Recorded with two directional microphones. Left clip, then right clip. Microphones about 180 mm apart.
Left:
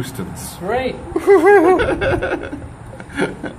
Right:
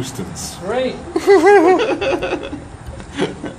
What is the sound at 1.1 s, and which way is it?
Speech, 5° right (ahead or behind).